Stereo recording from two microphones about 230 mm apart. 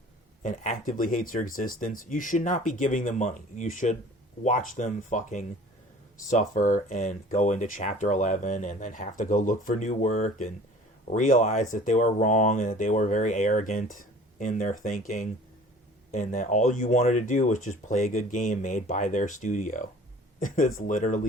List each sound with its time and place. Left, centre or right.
0.4 s speech: left